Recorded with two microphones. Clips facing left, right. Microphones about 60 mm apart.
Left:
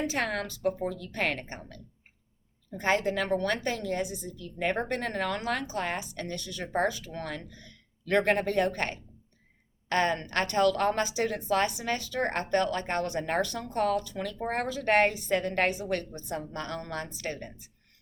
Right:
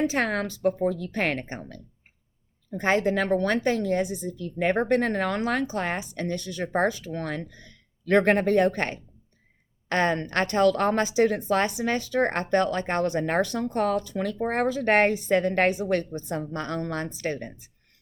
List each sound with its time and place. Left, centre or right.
0.1 s a woman's voice: right